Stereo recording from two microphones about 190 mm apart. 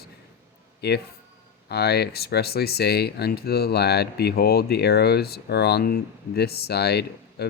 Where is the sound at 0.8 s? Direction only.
60° left (ahead or behind).